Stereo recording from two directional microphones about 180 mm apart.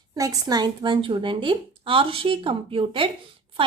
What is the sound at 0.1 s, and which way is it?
Speech, 20° right (ahead or behind).